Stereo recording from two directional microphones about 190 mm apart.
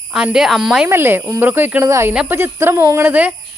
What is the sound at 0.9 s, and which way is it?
Speech, 10° right (ahead or behind).